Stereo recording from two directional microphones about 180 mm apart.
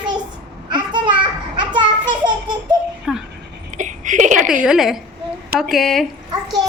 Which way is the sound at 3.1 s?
5° right (ahead or behind).